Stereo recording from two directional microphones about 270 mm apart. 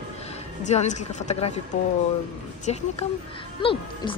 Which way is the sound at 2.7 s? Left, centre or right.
Left.